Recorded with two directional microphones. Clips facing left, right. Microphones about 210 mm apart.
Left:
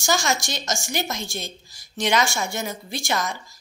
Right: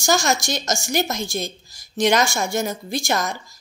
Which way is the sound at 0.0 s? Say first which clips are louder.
Right 4 dB; 40° right (ahead or behind).